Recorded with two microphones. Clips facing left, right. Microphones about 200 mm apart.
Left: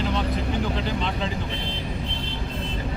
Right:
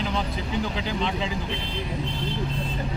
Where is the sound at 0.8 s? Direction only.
5° right (ahead or behind).